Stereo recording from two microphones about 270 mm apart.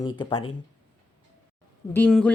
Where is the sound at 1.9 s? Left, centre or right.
Centre.